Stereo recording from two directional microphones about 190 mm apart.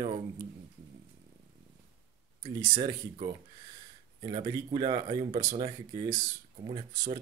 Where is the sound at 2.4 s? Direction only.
25° right (ahead or behind).